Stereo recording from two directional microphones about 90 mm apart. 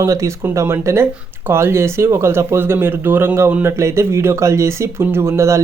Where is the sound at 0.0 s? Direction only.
35° right (ahead or behind).